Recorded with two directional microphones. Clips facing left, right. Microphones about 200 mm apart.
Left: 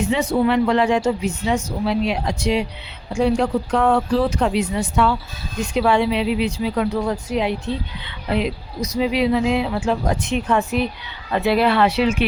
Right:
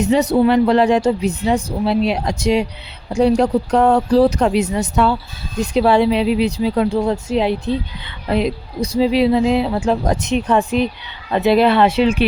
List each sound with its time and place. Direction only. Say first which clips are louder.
0.0 s speech: right 5 dB; 40° right (ahead or behind); by 11.9 s 25° right (ahead or behind)